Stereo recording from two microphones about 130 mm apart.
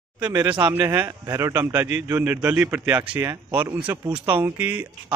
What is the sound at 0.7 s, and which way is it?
A man's voice, 20° right (ahead or behind).